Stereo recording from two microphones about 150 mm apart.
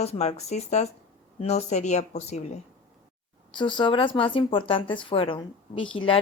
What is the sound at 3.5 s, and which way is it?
A woman's voice, 35° left (ahead or behind).